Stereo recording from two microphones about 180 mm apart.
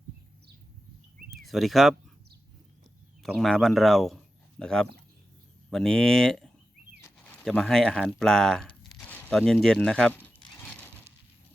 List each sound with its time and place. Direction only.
1.3 s speech: centre (ahead or behind)
3.2 s speech: centre (ahead or behind)
7.0 s a sound: 10° left (ahead or behind)